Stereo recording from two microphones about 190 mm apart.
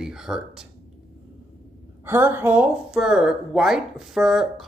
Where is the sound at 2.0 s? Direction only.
10° right (ahead or behind).